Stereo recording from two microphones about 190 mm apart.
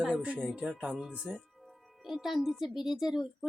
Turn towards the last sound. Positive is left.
turn(degrees=0)  # may be behind; listen again after turning